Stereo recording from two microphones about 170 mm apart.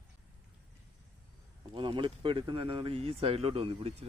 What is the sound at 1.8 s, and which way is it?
Speech, 30° right (ahead or behind).